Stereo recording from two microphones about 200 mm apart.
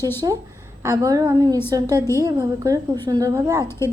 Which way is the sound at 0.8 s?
15° right (ahead or behind).